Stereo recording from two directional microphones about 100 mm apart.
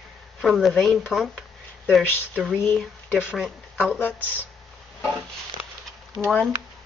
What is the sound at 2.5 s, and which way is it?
Speech, 20° left (ahead or behind).